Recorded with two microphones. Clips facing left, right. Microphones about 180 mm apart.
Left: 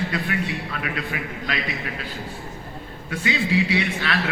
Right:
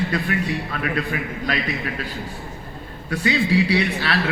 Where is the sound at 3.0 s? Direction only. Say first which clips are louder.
Right 4 dB; 40° right (ahead or behind).